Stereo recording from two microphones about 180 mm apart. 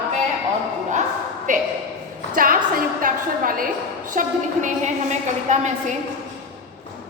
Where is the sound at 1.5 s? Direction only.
45° right (ahead or behind).